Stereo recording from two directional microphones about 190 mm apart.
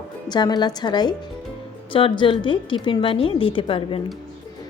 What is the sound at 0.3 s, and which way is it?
A woman's voice, 20° left (ahead or behind).